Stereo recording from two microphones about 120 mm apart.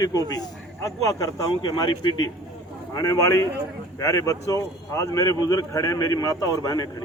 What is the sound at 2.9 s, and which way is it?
A man's voice, 30° left (ahead or behind).